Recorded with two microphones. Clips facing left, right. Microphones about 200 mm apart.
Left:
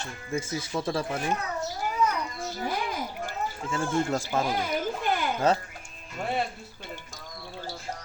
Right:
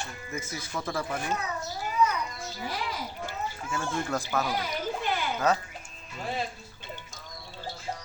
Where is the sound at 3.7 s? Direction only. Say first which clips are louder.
Left 4 dB; 25° left (ahead or behind).